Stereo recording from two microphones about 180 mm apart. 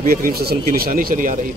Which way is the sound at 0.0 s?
55° right (ahead or behind).